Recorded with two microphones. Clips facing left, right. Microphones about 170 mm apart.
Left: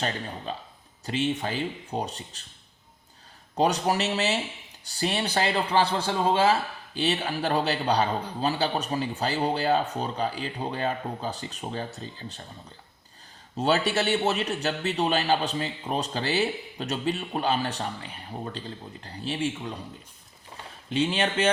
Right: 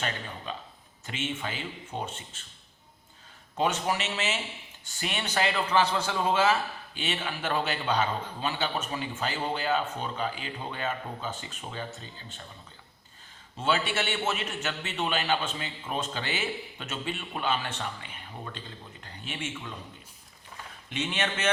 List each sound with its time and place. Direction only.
0.0 s a man's voice: 35° left (ahead or behind)
3.5 s a man's voice: 35° left (ahead or behind)
13.6 s a man's voice: 40° left (ahead or behind)
20.9 s a man's voice: 30° left (ahead or behind)